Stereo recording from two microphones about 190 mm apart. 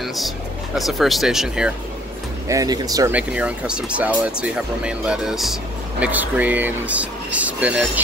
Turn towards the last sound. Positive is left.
turn(degrees=-5)  # may be behind; listen again after turning